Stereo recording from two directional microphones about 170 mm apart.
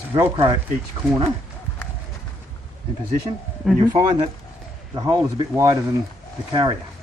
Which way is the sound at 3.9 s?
25° right (ahead or behind).